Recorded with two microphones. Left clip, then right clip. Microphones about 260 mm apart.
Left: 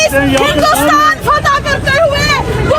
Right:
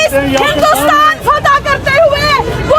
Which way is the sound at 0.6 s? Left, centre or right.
Right.